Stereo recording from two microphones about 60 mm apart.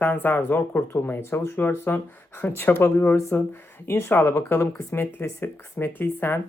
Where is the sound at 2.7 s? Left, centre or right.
Left.